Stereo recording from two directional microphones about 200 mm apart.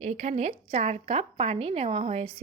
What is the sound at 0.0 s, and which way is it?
A woman's voice, 35° right (ahead or behind).